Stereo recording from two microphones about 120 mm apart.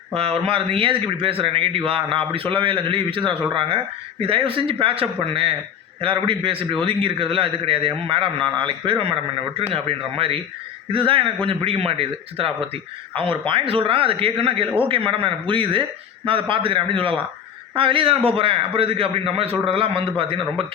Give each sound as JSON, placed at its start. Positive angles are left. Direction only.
{"t": 0.1, "sound": "speech", "side_deg": -55}